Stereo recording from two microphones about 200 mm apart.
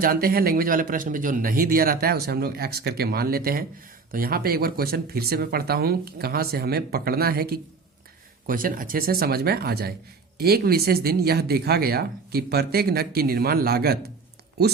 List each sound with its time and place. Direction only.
0.0 s speech: 45° right (ahead or behind)